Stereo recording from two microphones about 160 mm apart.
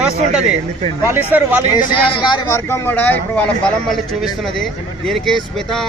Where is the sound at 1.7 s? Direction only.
25° left (ahead or behind).